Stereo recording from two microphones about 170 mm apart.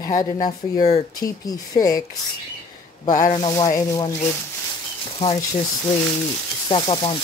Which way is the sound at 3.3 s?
25° left (ahead or behind).